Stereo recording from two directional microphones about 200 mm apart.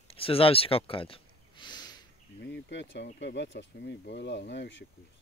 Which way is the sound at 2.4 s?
60° left (ahead or behind).